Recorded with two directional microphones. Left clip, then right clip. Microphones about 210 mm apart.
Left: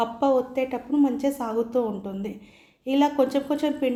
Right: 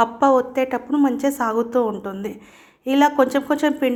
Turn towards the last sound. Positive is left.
turn(degrees=-5)  # may be behind; listen again after turning